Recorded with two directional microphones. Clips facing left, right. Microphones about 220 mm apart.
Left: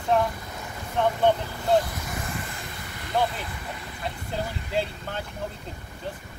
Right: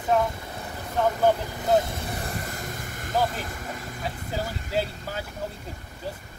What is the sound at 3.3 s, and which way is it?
Speech, 45° right (ahead or behind).